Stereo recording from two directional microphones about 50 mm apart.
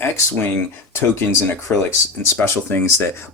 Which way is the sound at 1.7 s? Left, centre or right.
Left.